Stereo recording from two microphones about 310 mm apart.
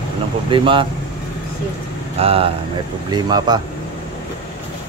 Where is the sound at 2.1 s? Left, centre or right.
Centre.